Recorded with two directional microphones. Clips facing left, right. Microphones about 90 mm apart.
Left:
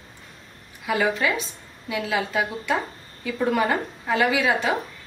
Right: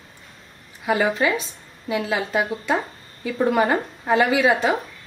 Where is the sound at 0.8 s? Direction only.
35° right (ahead or behind).